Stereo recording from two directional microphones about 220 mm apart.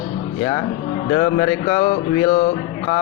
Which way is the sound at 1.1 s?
25° left (ahead or behind).